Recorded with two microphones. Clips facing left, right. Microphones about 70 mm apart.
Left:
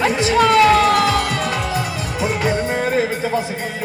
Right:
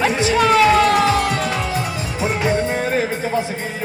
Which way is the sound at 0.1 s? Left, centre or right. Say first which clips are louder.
Left 1 dB; right.